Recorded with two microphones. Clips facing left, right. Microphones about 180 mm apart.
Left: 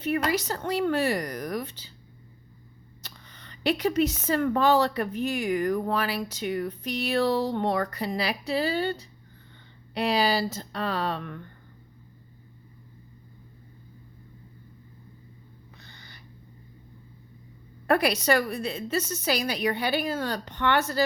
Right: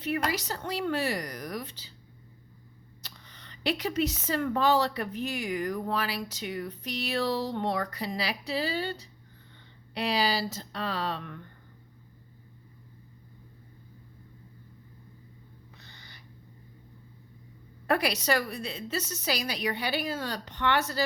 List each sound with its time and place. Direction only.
0.0 s speech: 50° left (ahead or behind)
3.0 s speech: 50° left (ahead or behind)
15.8 s gasp: 50° left (ahead or behind)
17.8 s speech: 55° left (ahead or behind)